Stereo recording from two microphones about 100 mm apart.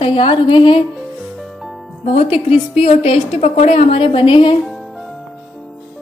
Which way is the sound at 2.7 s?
90° left.